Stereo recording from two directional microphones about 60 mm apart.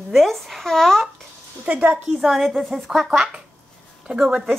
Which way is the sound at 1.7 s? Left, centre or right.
Centre.